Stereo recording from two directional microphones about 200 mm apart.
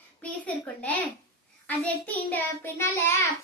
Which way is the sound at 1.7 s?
10° left (ahead or behind).